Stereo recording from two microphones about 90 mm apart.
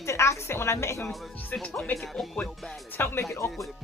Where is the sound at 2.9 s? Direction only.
25° left (ahead or behind).